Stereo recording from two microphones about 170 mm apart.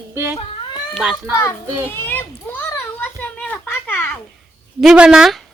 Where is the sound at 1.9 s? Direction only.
10° left (ahead or behind).